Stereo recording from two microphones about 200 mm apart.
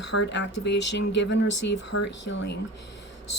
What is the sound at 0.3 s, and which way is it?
Speech, 60° left (ahead or behind).